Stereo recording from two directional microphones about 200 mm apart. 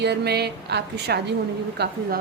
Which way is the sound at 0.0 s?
55° right (ahead or behind).